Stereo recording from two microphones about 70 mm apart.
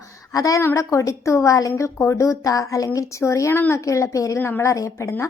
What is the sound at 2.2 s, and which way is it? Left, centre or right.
A woman's voice, left.